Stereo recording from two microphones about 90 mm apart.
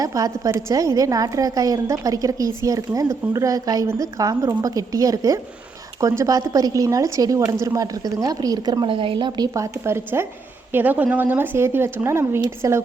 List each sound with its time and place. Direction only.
0.0 s a woman's voice: 40° right (ahead or behind)
8.9 s a woman's voice: 75° right (ahead or behind); by 9.5 s 55° right (ahead or behind)
9.6 s speech: 30° right (ahead or behind)